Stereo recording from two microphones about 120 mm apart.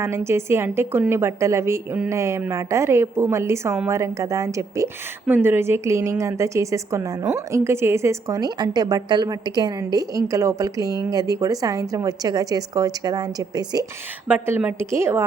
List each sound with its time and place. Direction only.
0.0 s a woman's voice: 20° right (ahead or behind)
14.3 s a woman's voice: 15° right (ahead or behind)